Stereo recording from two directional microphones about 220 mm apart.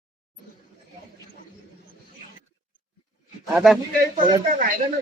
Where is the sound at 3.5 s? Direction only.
Centre (ahead or behind).